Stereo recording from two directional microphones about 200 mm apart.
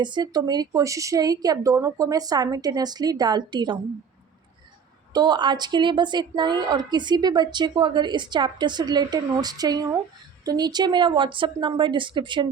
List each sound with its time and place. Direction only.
0.0 s a woman's voice: 20° right (ahead or behind)
5.1 s a woman's voice: 20° right (ahead or behind)